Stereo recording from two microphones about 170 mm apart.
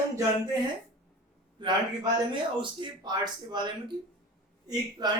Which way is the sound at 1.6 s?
25° right (ahead or behind).